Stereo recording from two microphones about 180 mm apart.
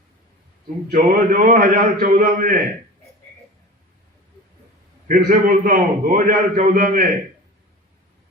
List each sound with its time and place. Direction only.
0.9 s a man's voice: 50° right (ahead or behind)
5.0 s a man's voice: 45° right (ahead or behind)